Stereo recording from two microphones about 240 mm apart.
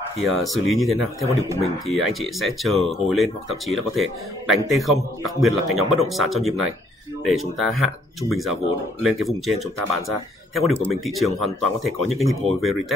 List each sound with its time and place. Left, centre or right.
0.4 s speech: centre